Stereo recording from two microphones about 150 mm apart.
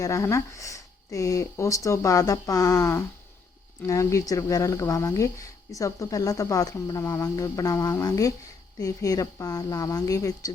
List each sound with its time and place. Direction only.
0.0 s speech: 20° left (ahead or behind)